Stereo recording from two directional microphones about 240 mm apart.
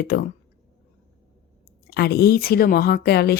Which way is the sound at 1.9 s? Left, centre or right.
Left.